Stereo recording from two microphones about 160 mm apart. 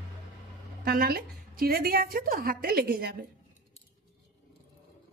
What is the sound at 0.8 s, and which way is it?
A woman's voice, 75° right (ahead or behind).